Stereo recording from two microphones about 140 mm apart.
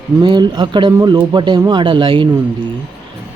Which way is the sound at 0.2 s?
35° right (ahead or behind).